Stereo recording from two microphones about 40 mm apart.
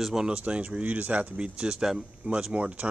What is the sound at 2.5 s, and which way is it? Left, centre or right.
Speech, right.